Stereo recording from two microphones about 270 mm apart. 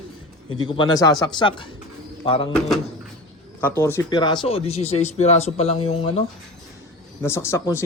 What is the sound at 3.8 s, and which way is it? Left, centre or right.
Speech, centre.